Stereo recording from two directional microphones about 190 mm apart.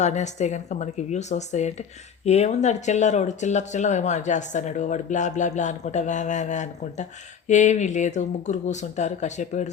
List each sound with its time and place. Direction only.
0.0 s speech: 40° left (ahead or behind)